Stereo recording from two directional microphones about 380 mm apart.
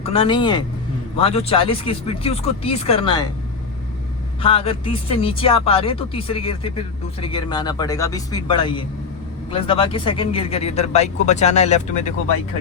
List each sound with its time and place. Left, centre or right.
0.0 s speech: centre
4.4 s speech: centre